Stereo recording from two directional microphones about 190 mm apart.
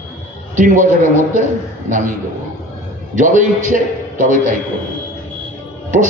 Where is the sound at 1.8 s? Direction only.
45° right (ahead or behind).